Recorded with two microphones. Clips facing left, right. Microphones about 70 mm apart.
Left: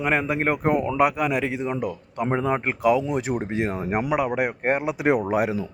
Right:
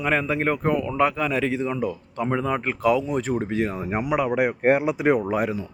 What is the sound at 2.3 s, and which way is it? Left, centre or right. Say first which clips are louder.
Speech: left 1 dB; left.